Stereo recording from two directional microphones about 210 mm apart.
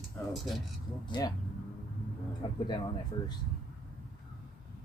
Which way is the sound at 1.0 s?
20° left (ahead or behind).